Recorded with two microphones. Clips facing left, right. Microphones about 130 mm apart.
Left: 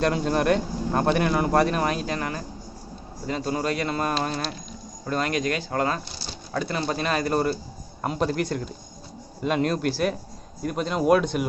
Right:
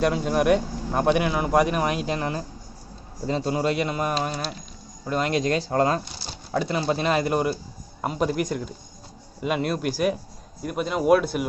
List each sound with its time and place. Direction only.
0.0 s speech: 10° right (ahead or behind); by 6.0 s 35° right (ahead or behind)
6.5 s speech: 20° right (ahead or behind)